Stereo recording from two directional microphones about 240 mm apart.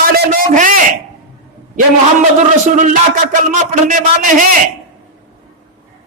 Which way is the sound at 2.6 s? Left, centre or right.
Right.